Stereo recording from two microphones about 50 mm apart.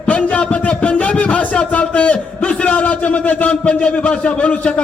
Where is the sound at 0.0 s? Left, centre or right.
Left.